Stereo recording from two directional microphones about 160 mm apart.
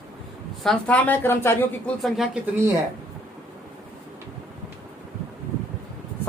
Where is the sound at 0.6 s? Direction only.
5° left (ahead or behind).